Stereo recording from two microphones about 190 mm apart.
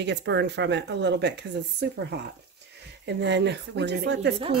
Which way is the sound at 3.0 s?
65° right (ahead or behind).